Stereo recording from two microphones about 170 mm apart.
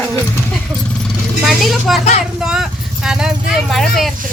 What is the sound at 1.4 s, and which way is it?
Speech, centre (ahead or behind).